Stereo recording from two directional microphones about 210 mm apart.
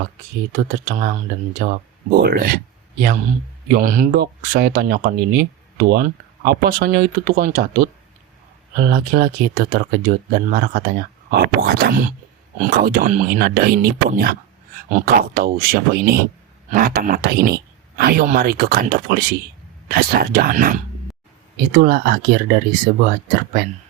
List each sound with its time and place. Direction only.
0.5 s speech: 40° right (ahead or behind)
3.7 s speech: 40° right (ahead or behind)
8.7 s speech: 45° right (ahead or behind)